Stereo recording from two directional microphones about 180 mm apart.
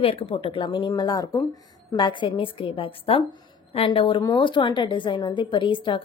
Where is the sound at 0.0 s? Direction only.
30° left (ahead or behind).